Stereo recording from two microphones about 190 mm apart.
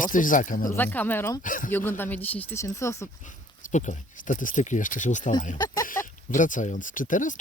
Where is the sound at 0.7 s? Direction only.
10° left (ahead or behind).